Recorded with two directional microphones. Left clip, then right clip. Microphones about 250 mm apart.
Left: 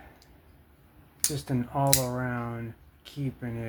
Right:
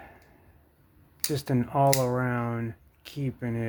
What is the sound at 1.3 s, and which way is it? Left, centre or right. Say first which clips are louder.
Speech: right 6 dB; right.